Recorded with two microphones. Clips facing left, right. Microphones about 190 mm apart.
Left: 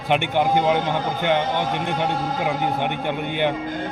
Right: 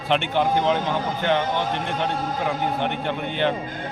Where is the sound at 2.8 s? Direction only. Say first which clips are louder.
Left 1 dB; 15° left (ahead or behind).